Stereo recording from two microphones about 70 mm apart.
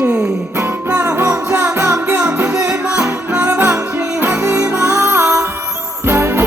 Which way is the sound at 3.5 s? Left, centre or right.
Right.